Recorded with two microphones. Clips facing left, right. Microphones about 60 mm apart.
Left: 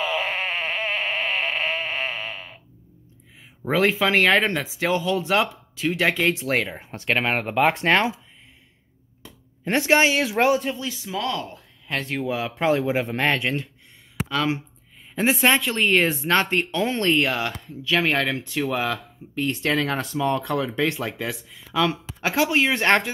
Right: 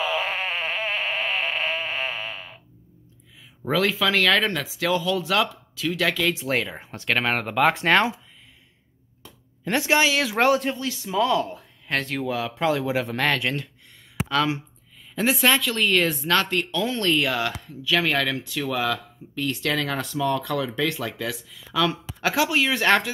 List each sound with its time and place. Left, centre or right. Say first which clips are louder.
0.0 s a sound: even; left
0.9 s sheep: left 1 dB; centre
3.7 s speech: left 2 dB; left
6.9 s speech: even; centre
9.7 s speech: left 2 dB; left
10.3 s speech: even; centre
12.3 s speech: left 3 dB; left
20.2 s speech: left 1 dB; left